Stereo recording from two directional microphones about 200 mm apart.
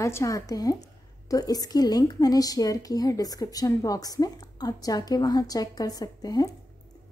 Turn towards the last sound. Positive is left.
turn(degrees=20)  # may be behind; listen again after turning